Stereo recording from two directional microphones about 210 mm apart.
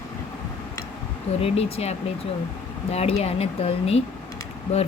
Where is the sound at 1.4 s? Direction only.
30° left (ahead or behind).